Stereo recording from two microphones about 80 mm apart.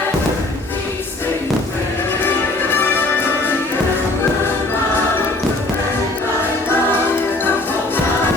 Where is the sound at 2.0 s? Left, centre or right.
Left.